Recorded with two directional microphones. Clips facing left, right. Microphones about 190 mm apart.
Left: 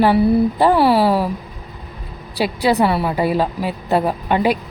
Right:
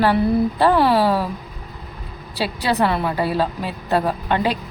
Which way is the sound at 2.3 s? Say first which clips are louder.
Left 4 dB; 15° left (ahead or behind).